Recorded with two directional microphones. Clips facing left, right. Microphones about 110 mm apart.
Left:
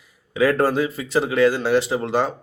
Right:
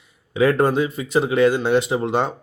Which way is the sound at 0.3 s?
20° right (ahead or behind).